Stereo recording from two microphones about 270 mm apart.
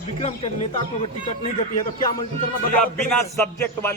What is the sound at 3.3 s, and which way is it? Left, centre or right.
Music, centre.